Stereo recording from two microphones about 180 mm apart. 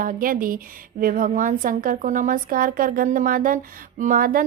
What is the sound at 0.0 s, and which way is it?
Speech, 50° right (ahead or behind).